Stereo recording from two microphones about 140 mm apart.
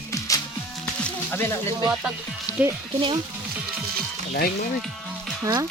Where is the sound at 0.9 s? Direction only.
10° left (ahead or behind).